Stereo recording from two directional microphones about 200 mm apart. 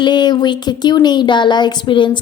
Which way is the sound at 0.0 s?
20° left (ahead or behind).